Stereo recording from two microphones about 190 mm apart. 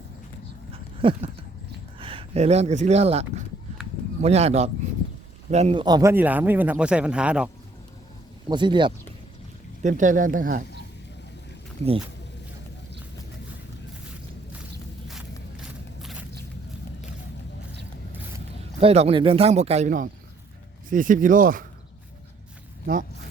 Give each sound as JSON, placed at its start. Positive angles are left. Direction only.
{"t": 1.0, "sound": "a sound", "side_deg": -25}
{"t": 2.0, "sound": "speech", "side_deg": -30}
{"t": 5.8, "sound": "speech", "side_deg": -20}
{"t": 8.4, "sound": "speech", "side_deg": -25}
{"t": 9.8, "sound": "speech", "side_deg": -40}
{"t": 15.0, "sound": "walk", "side_deg": 0}
{"t": 18.8, "sound": "speech", "side_deg": -30}